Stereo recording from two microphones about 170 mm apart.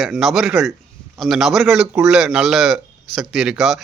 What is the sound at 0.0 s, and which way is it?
A man's voice, centre (ahead or behind).